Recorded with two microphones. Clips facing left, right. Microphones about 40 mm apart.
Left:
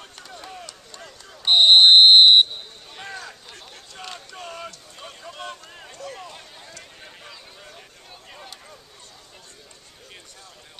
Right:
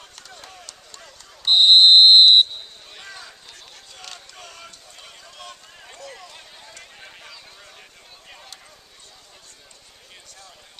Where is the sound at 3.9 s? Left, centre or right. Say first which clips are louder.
Left 5 dB; centre.